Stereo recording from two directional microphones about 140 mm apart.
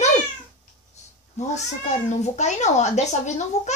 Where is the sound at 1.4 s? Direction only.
55° left (ahead or behind).